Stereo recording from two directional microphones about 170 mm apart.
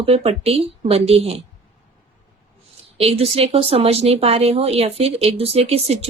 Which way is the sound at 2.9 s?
35° right (ahead or behind).